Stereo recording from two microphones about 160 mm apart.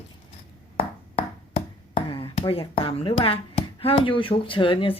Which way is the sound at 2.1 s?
30° left (ahead or behind).